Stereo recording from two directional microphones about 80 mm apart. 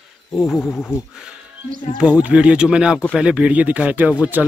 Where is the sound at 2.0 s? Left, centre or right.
Centre.